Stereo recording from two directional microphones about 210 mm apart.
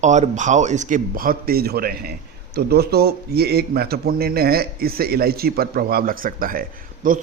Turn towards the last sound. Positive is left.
turn(degrees=-40)  # may be behind; listen again after turning